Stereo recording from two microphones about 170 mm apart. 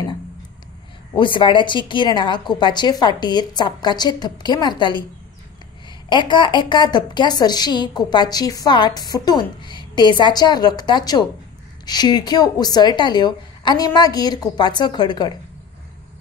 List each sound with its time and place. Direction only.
1.1 s a woman's voice: 30° left (ahead or behind)
6.0 s a woman's voice: 30° left (ahead or behind)